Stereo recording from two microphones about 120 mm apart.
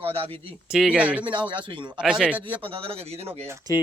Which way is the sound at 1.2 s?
40° right (ahead or behind).